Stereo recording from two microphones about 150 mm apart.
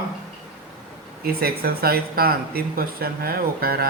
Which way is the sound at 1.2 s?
90° right.